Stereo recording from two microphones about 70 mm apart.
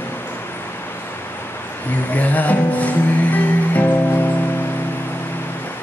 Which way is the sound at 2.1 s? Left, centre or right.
Left.